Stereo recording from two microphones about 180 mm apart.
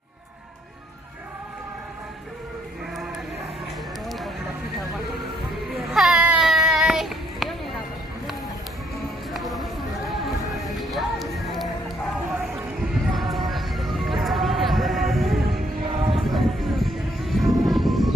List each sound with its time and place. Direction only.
5.8 s baby cry: centre (ahead or behind)
9.3 s a sound: centre (ahead or behind)
10.8 s music: centre (ahead or behind)
13.1 s music: centre (ahead or behind)
15.9 s music: 30° right (ahead or behind)
16.3 s music: centre (ahead or behind)